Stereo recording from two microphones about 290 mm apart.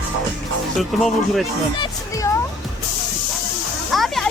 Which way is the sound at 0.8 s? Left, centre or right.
Centre.